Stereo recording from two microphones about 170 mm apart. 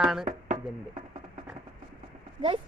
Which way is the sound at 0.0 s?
5° right (ahead or behind).